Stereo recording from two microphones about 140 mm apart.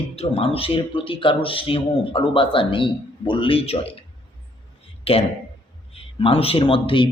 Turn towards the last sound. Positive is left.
turn(degrees=40)  # may be behind; listen again after turning